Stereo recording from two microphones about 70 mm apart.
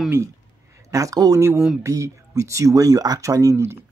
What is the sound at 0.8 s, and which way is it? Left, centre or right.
Speech, right.